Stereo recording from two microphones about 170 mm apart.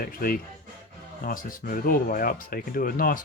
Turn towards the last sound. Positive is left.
turn(degrees=55)  # may be behind; listen again after turning